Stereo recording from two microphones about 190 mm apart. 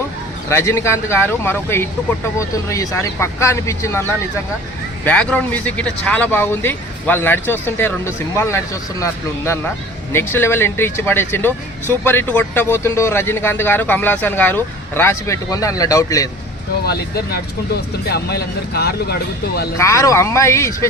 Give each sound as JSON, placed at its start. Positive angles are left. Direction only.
{"t": 0.5, "sound": "speech", "side_deg": 15}
{"t": 5.0, "sound": "speech", "side_deg": 5}
{"t": 16.8, "sound": "speech", "side_deg": 55}
{"t": 19.7, "sound": "speech", "side_deg": 15}